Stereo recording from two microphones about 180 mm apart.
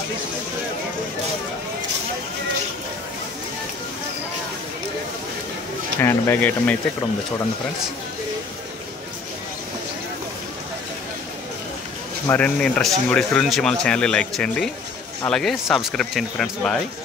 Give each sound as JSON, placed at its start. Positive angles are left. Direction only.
{"t": 5.9, "sound": "speech", "side_deg": 10}
{"t": 12.3, "sound": "speech", "side_deg": 5}